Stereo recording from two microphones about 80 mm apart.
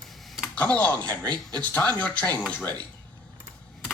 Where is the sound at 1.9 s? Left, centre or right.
Centre.